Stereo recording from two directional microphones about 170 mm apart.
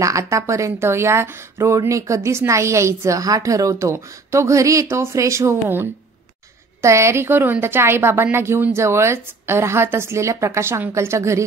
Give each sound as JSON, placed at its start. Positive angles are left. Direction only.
{"t": 0.0, "sound": "speech", "side_deg": -20}